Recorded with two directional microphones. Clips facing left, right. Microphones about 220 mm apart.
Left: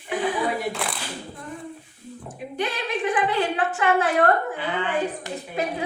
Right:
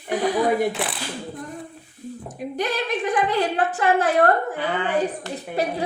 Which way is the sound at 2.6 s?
40° right (ahead or behind).